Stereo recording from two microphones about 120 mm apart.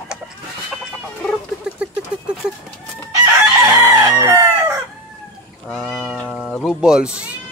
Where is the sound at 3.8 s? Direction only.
20° right (ahead or behind).